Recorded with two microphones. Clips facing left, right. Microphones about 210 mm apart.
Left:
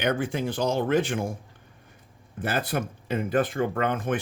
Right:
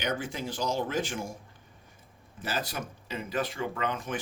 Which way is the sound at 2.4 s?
55° left (ahead or behind).